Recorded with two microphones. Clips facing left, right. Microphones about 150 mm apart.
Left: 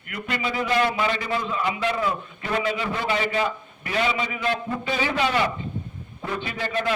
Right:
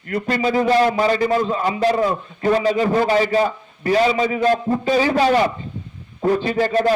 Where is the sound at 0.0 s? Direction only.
35° right (ahead or behind).